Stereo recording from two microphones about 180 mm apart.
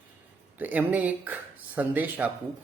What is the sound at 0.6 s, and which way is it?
A man's voice, 10° right (ahead or behind).